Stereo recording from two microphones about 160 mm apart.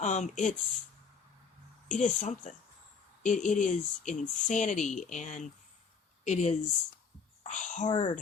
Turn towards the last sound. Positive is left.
turn(degrees=50)  # may be behind; listen again after turning